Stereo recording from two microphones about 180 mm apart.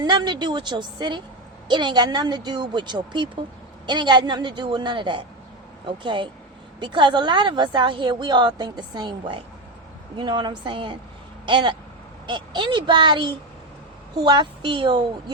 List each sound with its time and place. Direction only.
0.0 s speech: 25° right (ahead or behind)